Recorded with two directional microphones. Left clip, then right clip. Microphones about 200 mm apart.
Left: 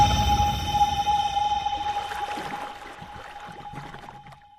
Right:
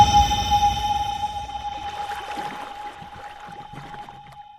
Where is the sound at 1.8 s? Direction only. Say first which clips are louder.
Left 1 dB; centre (ahead or behind).